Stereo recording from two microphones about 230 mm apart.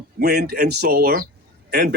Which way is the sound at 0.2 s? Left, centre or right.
Right.